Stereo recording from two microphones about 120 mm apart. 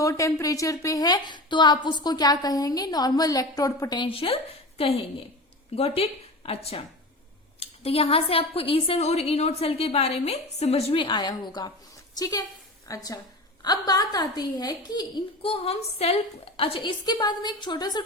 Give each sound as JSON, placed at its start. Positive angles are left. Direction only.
{"t": 0.0, "sound": "a woman's voice", "side_deg": 25}
{"t": 15.4, "sound": "a woman's voice", "side_deg": 50}
{"t": 17.1, "sound": "a woman's voice", "side_deg": 35}